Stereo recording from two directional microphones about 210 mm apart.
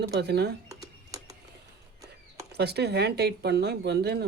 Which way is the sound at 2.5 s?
50° right (ahead or behind).